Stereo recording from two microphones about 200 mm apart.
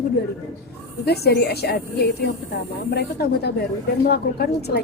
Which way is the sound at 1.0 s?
55° left (ahead or behind).